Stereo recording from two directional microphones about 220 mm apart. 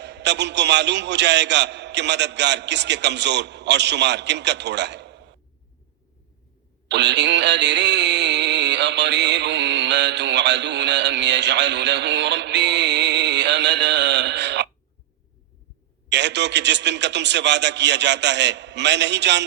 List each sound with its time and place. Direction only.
0.0 s a man's voice: 50° right (ahead or behind)
6.8 s synthetic singing: 50° right (ahead or behind)
16.0 s a man's voice: 50° right (ahead or behind)